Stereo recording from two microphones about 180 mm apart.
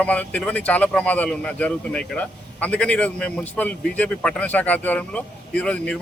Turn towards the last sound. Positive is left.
turn(degrees=5)  # may be behind; listen again after turning